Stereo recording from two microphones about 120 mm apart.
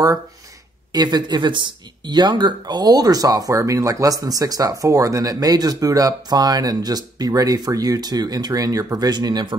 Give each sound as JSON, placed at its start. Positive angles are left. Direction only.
{"t": 0.9, "sound": "speech", "side_deg": -35}